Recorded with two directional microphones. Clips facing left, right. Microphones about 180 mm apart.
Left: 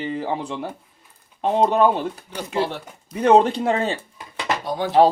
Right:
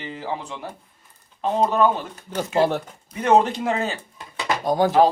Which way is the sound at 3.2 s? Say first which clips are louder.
Left 3 dB; 30° left (ahead or behind).